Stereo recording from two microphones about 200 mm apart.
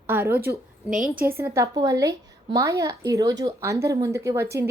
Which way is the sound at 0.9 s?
45° right (ahead or behind).